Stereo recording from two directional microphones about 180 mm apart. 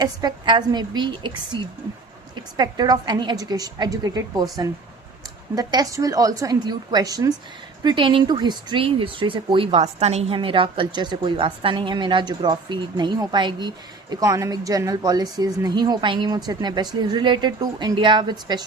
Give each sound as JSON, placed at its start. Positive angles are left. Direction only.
{"t": 0.0, "sound": "speech", "side_deg": -20}
{"t": 5.5, "sound": "speech", "side_deg": -20}